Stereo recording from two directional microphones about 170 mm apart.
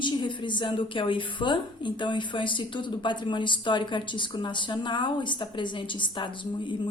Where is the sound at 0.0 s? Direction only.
30° left (ahead or behind).